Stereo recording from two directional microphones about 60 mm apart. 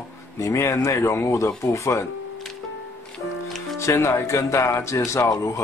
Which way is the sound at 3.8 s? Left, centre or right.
Left.